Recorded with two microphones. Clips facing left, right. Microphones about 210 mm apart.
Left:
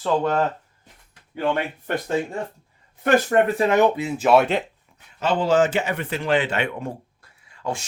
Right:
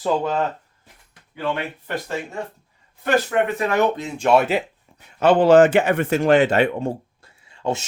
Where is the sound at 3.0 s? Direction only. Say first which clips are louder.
Left 2 dB; 45° left (ahead or behind).